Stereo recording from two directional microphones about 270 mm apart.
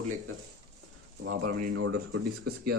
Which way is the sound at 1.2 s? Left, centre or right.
Right.